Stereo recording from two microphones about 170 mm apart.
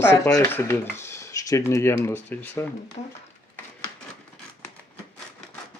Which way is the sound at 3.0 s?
45° left (ahead or behind).